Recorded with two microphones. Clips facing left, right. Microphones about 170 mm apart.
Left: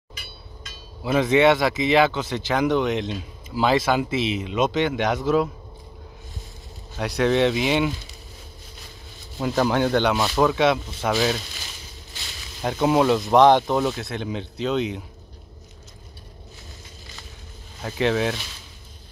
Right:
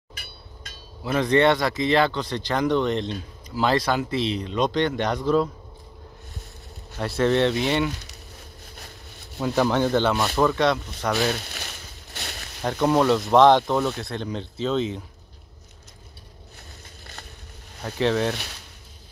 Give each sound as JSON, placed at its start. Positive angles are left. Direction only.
{"t": 0.1, "sound": "hammer", "side_deg": -55}
{"t": 1.0, "sound": "speech", "side_deg": 5}
{"t": 7.0, "sound": "speech", "side_deg": 0}
{"t": 8.7, "sound": "a sound", "side_deg": -60}
{"t": 9.6, "sound": "speech", "side_deg": 5}
{"t": 11.4, "sound": "a sound", "side_deg": -60}
{"t": 12.6, "sound": "speech", "side_deg": 10}
{"t": 17.8, "sound": "speech", "side_deg": 5}